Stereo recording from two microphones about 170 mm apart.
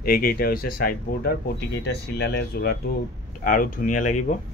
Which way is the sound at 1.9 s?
70° left (ahead or behind).